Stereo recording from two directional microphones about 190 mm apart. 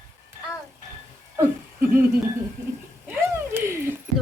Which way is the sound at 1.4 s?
10° right (ahead or behind).